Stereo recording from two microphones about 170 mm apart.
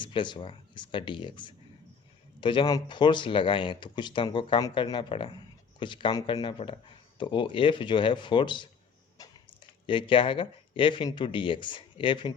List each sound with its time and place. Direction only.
0.0 s speech: 30° left (ahead or behind)
9.8 s speech: 30° left (ahead or behind)